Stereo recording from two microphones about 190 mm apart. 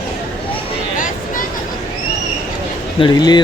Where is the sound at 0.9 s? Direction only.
45° left (ahead or behind).